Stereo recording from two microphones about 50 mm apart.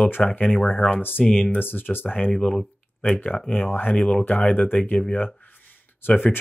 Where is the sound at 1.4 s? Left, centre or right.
Left.